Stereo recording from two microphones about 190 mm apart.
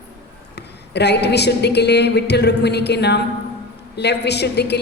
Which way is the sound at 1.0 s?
60° left (ahead or behind).